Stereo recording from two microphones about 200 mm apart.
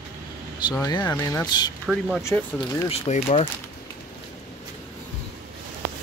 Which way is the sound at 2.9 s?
30° left (ahead or behind).